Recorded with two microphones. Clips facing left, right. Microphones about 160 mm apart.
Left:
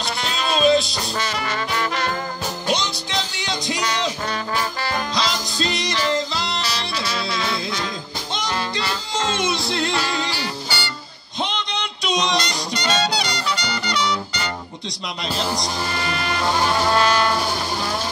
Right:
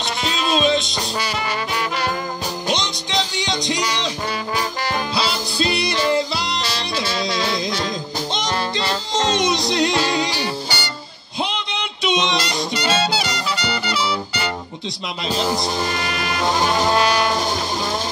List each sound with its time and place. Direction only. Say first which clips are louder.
0.0 s music: right 2 dB; centre (ahead or behind)
2.7 s music: even; 5° left (ahead or behind)
4.8 s music: right 1 dB; 10° right (ahead or behind)
7.0 s music: right 5 dB; 30° right (ahead or behind)
11.4 s music: even; 5° right (ahead or behind)
15.3 s speech: right 4 dB; centre (ahead or behind)
16.4 s brass instrument: right 1 dB; 15° right (ahead or behind)